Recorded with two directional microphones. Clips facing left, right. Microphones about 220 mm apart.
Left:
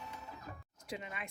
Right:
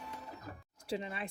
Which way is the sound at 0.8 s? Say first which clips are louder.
Right 6 dB; 30° right (ahead or behind).